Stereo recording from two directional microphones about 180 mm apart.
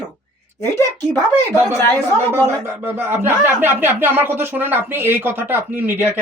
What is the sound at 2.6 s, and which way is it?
Speech, 15° right (ahead or behind).